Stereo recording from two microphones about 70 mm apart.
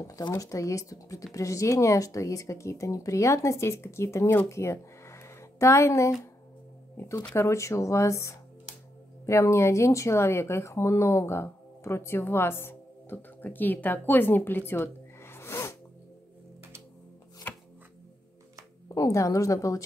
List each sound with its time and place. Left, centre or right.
0.3 s speech: left
7.3 s speech: left
14.7 s snort: left
17.4 s chopping: left
18.9 s speech: left